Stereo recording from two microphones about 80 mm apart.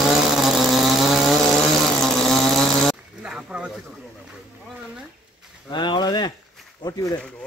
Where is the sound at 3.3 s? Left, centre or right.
Centre.